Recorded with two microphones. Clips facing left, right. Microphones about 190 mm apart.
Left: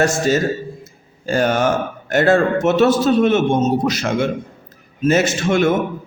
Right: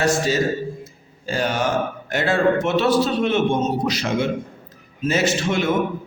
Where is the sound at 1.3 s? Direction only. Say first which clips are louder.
Left 5 dB; 50° left (ahead or behind).